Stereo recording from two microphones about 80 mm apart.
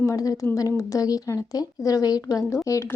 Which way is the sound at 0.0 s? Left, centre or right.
Left.